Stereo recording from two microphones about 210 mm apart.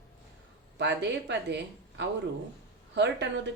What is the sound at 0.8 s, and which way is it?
Speech, 55° right (ahead or behind).